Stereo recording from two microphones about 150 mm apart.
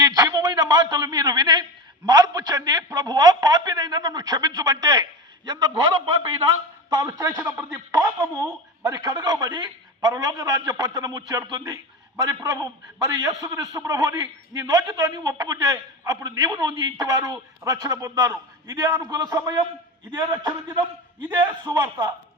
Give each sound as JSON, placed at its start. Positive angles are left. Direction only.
{"t": 0.0, "sound": "a sound", "side_deg": -25}
{"t": 2.0, "sound": "a man's voice", "side_deg": -25}
{"t": 6.9, "sound": "a man's voice", "side_deg": -25}
{"t": 21.6, "sound": "a man's voice", "side_deg": -25}